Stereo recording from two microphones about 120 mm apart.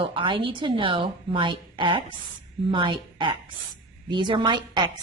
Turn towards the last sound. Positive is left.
turn(degrees=-40)  # may be behind; listen again after turning